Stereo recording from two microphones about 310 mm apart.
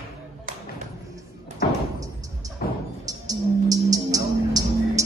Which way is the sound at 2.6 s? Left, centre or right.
Left.